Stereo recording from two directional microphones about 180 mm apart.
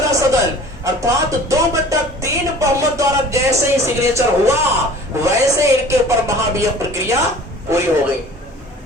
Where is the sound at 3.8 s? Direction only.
15° right (ahead or behind).